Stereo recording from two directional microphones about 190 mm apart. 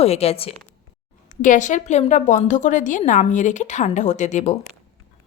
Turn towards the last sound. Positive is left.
turn(degrees=40)  # may be behind; listen again after turning